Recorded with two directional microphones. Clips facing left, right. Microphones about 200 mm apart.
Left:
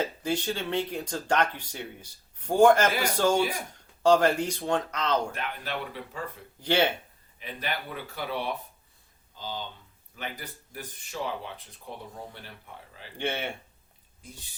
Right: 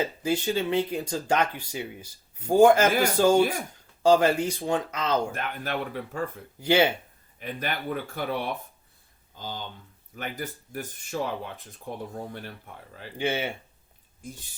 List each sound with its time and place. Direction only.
0.2 s speech: 5° right (ahead or behind)
5.3 s speech: 50° right (ahead or behind)
6.6 s speech: 10° right (ahead or behind)
7.3 s speech: 50° right (ahead or behind)
9.4 s speech: 50° right (ahead or behind)
13.1 s speech: 5° right (ahead or behind)